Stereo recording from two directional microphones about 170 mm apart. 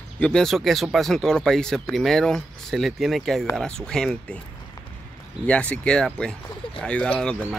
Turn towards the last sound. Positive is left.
turn(degrees=5)  # may be behind; listen again after turning